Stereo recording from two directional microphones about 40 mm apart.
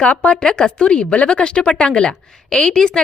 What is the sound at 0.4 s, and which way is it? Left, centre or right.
Speech, centre.